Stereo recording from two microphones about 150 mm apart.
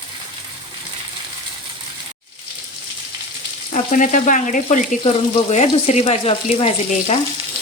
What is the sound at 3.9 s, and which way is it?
Speech, 60° left (ahead or behind).